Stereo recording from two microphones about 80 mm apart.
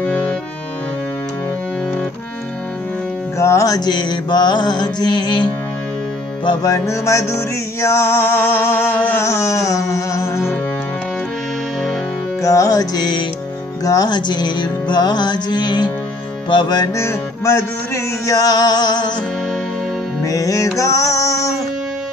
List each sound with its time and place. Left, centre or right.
0.0 s music: centre
3.3 s mantra: left
6.6 s music: left
12.4 s music: left
13.8 s mantra: left
16.4 s mantra: left
16.9 s music: left
20.2 s music: left